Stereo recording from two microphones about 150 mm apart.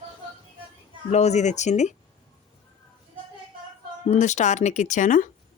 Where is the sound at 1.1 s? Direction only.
50° left (ahead or behind).